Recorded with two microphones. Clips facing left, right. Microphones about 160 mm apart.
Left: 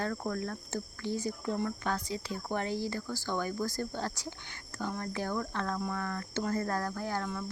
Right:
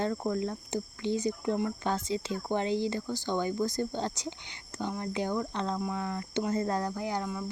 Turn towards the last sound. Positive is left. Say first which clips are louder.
# right 2 dB
turn(degrees=-15)  # may be behind; listen again after turning